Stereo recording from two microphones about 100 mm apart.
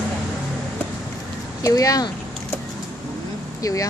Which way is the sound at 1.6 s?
35° left (ahead or behind).